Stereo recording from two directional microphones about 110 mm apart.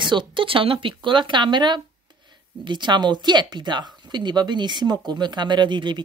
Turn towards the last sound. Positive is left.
turn(degrees=-45)  # may be behind; listen again after turning